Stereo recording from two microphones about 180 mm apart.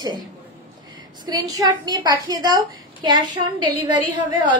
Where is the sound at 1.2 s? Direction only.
20° right (ahead or behind).